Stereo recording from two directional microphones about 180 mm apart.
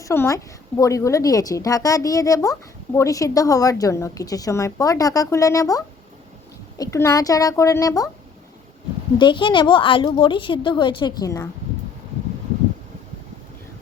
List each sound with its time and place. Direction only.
0.0 s a woman's voice: 15° left (ahead or behind)
9.1 s a woman's voice: 25° left (ahead or behind)